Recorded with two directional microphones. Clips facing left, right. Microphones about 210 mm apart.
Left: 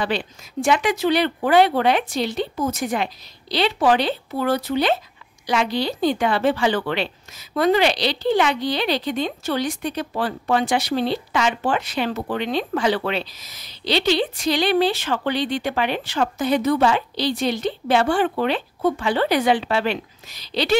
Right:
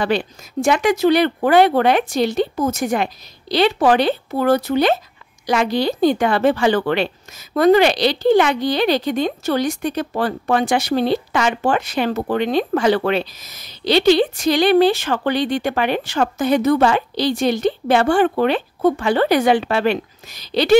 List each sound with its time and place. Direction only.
0.0 s speech: 45° right (ahead or behind)